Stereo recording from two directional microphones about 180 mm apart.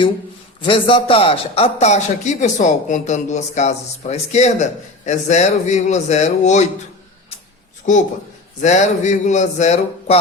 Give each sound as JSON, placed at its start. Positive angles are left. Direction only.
{"t": 0.6, "sound": "a man's voice", "side_deg": 30}
{"t": 7.9, "sound": "a man's voice", "side_deg": 45}